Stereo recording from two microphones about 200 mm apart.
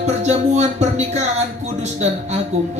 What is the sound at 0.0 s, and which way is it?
Music, 35° right (ahead or behind).